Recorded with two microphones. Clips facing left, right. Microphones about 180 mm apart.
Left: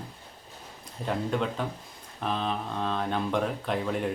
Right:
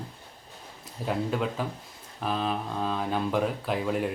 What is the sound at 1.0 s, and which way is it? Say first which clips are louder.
Speech: even; 5° right (ahead or behind).